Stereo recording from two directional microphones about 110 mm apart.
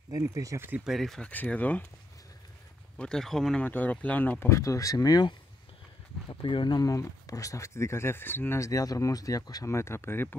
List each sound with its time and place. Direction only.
0.1 s speech: 30° right (ahead or behind)
0.8 s speech: centre (ahead or behind)
1.3 s speech: 15° left (ahead or behind)
3.0 s speech: 5° left (ahead or behind)
3.6 s speech: 15° left (ahead or behind)
4.5 s speech: 30° left (ahead or behind)
6.2 s speech: 45° left (ahead or behind)
6.8 s speech: 30° left (ahead or behind)